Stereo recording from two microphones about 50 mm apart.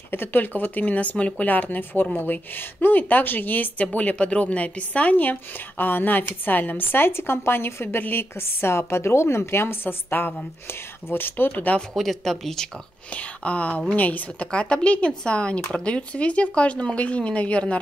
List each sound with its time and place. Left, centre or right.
0.1 s a woman's voice: left
11.9 s speech: centre
13.1 s speech: left
14.5 s speech: left